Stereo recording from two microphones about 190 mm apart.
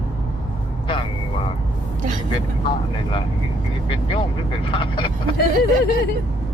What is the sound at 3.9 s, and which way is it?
Vehicle, 25° left (ahead or behind).